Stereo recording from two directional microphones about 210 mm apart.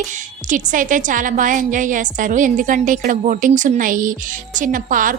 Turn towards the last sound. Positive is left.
turn(degrees=-40)  # may be behind; listen again after turning